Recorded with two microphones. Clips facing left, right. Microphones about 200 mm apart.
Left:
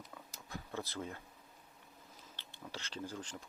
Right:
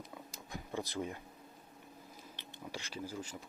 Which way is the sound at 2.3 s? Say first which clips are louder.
Right 3 dB; 15° right (ahead or behind).